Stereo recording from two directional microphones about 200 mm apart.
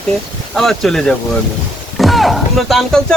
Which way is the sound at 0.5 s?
Centre (ahead or behind).